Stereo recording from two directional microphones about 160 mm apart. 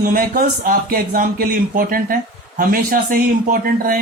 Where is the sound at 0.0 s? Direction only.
65° right (ahead or behind).